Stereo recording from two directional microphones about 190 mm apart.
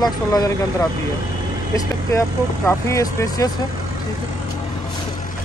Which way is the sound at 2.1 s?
15° left (ahead or behind).